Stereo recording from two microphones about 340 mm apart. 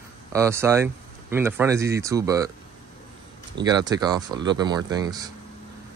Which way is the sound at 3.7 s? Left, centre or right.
Centre.